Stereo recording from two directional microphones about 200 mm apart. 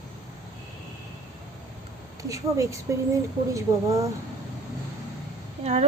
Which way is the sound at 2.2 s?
15° right (ahead or behind).